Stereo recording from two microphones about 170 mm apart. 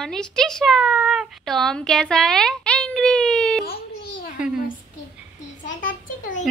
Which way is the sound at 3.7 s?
60° left (ahead or behind).